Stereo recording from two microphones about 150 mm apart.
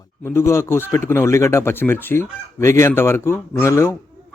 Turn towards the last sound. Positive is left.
turn(degrees=20)  # may be behind; listen again after turning